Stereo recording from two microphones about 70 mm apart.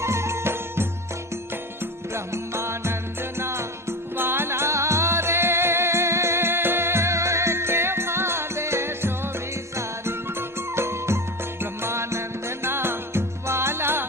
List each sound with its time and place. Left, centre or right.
0.0 s music: right